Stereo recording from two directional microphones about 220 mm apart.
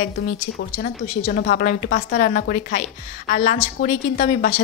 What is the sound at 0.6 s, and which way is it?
A woman's voice, 45° left (ahead or behind).